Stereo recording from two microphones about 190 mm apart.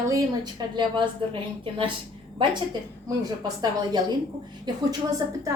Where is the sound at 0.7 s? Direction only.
25° right (ahead or behind).